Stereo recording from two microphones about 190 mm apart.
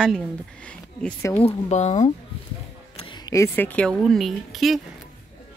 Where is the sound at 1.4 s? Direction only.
35° left (ahead or behind).